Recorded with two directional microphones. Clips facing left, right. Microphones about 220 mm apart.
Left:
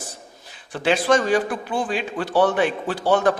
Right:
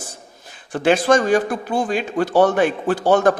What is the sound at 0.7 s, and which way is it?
A man's voice, 45° right (ahead or behind).